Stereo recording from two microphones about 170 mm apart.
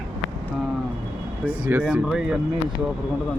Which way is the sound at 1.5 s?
10° right (ahead or behind).